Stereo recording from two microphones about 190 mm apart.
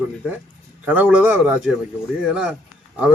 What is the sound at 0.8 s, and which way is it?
A man's voice, 10° right (ahead or behind).